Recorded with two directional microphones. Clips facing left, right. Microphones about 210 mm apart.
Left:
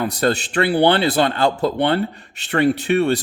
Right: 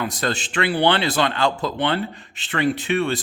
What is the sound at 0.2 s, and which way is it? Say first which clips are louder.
Speech: left 7 dB; 35° left (ahead or behind).